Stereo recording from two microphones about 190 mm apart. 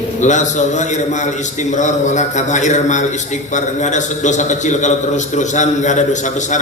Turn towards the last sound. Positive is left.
turn(degrees=40)  # may be behind; listen again after turning